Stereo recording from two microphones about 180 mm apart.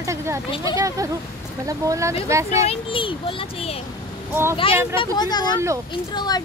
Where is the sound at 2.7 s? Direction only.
30° left (ahead or behind).